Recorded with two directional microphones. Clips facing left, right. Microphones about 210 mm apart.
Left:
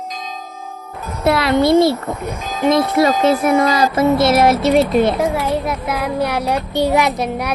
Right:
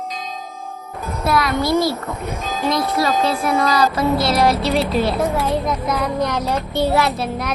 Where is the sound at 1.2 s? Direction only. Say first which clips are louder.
Left 5 dB; 25° left (ahead or behind).